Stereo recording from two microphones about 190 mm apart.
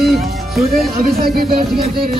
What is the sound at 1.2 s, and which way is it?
Speech, 50° right (ahead or behind).